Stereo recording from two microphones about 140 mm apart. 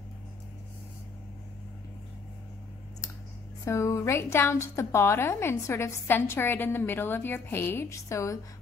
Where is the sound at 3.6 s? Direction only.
20° left (ahead or behind).